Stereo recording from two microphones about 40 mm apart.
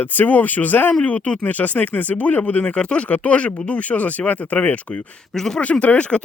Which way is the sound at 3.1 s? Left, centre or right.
Left.